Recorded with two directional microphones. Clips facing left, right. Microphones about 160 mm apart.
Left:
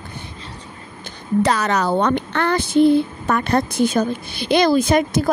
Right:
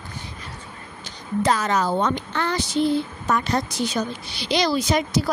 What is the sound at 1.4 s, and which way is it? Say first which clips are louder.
Speech: left 3 dB; 70° left (ahead or behind).